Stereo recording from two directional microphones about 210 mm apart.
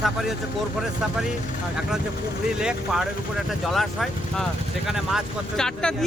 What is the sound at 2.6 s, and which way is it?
Speech, 5° right (ahead or behind).